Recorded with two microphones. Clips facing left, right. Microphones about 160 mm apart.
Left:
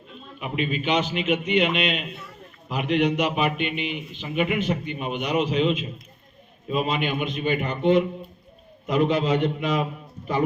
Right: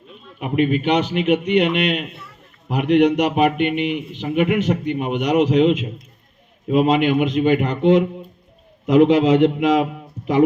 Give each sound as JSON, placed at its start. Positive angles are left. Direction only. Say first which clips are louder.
{"t": 0.3, "sound": "a man's voice", "louder": "right 9 dB", "side_deg": -55}